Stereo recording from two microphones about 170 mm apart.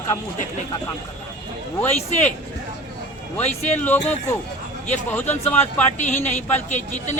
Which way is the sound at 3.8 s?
10° left (ahead or behind).